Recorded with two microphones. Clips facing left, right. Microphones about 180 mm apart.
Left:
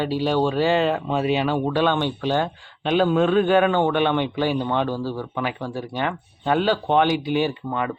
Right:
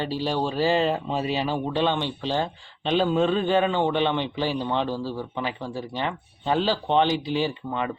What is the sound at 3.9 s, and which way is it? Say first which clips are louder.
A man's voice: left 3 dB; 60° left (ahead or behind).